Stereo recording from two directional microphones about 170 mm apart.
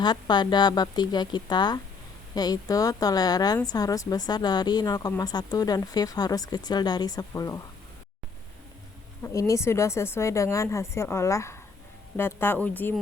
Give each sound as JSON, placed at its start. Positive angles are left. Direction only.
{"t": 0.0, "sound": "a woman's voice", "side_deg": 25}
{"t": 9.2, "sound": "a woman's voice", "side_deg": 20}